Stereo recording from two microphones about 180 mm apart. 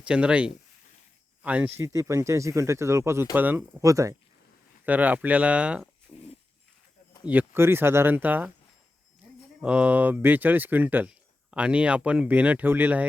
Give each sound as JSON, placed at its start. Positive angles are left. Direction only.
{"t": 0.0, "sound": "speech", "side_deg": -5}
{"t": 6.1, "sound": "dog", "side_deg": 5}
{"t": 7.3, "sound": "speech", "side_deg": -10}
{"t": 9.6, "sound": "speech", "side_deg": -5}